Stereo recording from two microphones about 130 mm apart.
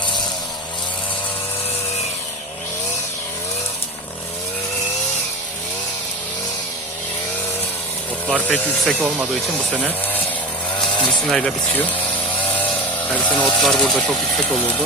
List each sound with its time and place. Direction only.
8.3 s speech: 5° left (ahead or behind)
9.0 s speech: 15° right (ahead or behind)
11.3 s speech: 5° left (ahead or behind)
12.5 s chainsaw: 15° left (ahead or behind)
13.1 s speech: 10° left (ahead or behind)